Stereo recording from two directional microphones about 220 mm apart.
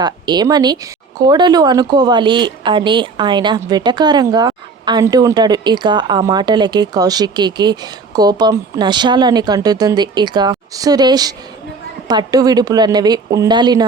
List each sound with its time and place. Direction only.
0.0 s speech: 20° right (ahead or behind)